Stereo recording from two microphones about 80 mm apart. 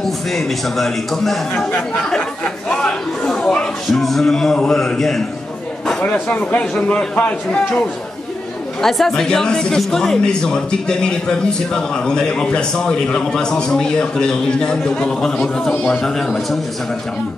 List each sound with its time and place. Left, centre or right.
0.0 s a man's voice: centre
2.7 s a sound: centre
6.0 s a man's voice: centre
8.8 s a man's voice: centre